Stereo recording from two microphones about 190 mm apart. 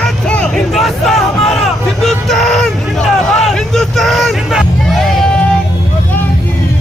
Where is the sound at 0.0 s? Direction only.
5° left (ahead or behind).